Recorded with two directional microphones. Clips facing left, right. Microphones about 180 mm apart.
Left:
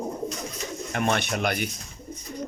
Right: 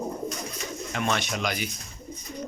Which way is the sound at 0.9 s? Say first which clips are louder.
Left 3 dB; 55° left (ahead or behind).